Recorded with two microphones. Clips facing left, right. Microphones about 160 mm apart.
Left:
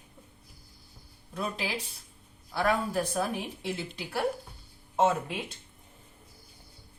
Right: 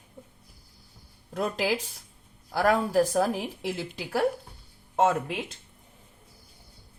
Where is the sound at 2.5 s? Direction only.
80° right.